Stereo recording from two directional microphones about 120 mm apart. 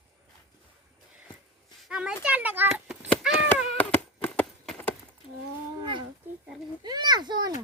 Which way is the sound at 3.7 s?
15° left (ahead or behind).